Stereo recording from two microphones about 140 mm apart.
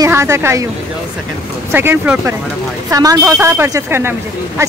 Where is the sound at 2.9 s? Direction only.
25° right (ahead or behind).